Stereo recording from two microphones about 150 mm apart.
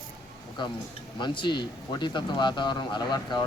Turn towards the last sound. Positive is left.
turn(degrees=30)  # may be behind; listen again after turning